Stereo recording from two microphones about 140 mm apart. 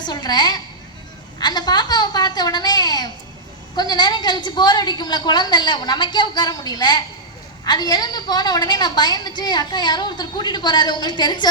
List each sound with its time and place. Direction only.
0.0 s a woman's voice: 30° left (ahead or behind)